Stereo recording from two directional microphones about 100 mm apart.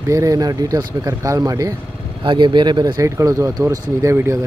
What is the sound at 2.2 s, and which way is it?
Speech, 50° right (ahead or behind).